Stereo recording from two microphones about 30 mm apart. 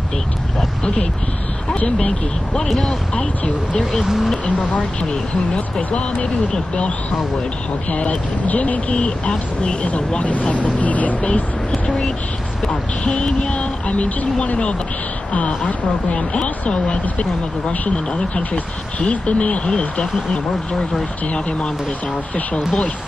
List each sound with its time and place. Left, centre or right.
4.6 s speech: left
6.2 s speech: left
7.9 s speech: left
8.9 s speech: left
10.5 s speech: left
13.5 s speech: left
21.3 s speech: left